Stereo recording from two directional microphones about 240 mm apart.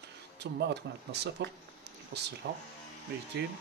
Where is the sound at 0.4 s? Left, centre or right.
Right.